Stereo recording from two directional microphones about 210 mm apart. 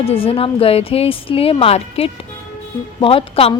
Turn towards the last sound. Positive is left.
turn(degrees=25)  # may be behind; listen again after turning